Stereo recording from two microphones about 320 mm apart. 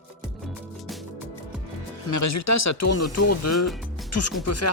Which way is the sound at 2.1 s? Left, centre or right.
Left.